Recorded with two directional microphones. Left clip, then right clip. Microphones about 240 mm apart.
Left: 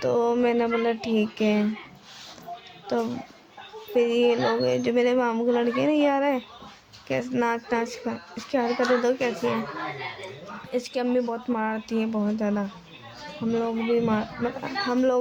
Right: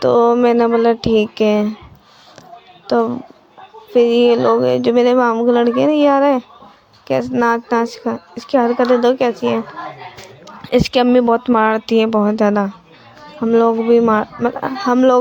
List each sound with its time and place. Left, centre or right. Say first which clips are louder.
0.0 s speech: right 11 dB; right
2.8 s speech: right 12 dB; right
10.7 s speech: right 14 dB; right